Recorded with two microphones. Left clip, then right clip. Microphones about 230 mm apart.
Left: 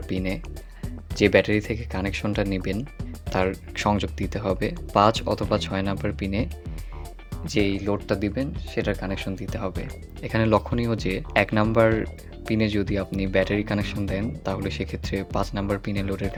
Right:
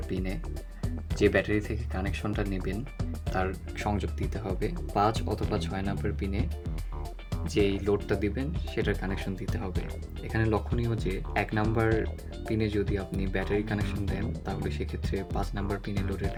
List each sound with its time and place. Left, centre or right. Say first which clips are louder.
0.1 s speech: left 7 dB; left
3.3 s speech: left 6 dB; centre
3.8 s speech: left 8 dB; left
7.5 s speech: left 2 dB; left
16.2 s speech: left 4 dB; centre